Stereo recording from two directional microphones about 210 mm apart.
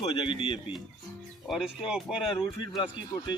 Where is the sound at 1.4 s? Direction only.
Centre (ahead or behind).